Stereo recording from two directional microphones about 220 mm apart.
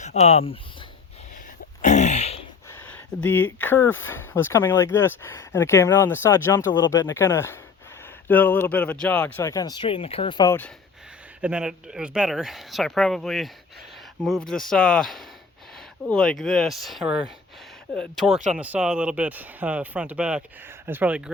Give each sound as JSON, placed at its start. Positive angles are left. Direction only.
{"t": 0.0, "sound": "speech", "side_deg": 30}
{"t": 1.8, "sound": "a sound", "side_deg": 35}
{"t": 2.6, "sound": "speech", "side_deg": 10}
{"t": 11.3, "sound": "speech", "side_deg": -5}